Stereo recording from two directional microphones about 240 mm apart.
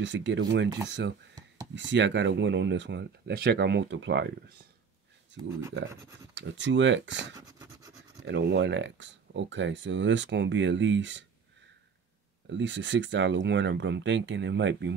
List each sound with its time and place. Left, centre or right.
0.0 s speech: right
6.3 s speech: right
7.3 s a sound: centre
8.3 s speech: right
12.5 s speech: right